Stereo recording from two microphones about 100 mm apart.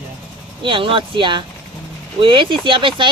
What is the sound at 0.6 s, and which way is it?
Speech, 60° right (ahead or behind).